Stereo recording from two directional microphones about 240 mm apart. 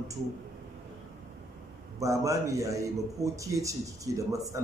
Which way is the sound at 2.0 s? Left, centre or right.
Centre.